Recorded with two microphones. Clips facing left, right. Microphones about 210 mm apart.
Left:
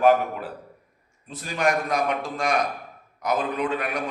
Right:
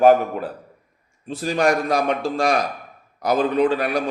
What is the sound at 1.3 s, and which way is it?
A man's voice, 35° right (ahead or behind).